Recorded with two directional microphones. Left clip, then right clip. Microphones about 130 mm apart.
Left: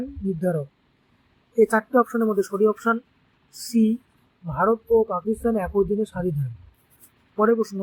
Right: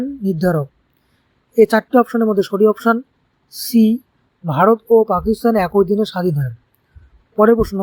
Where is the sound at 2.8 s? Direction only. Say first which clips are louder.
Right 7 dB; 90° right.